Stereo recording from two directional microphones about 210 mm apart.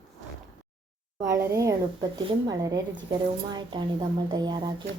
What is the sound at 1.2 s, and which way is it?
Speech, 15° right (ahead or behind).